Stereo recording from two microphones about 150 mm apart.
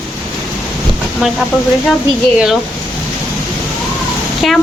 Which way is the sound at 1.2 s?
5° right (ahead or behind).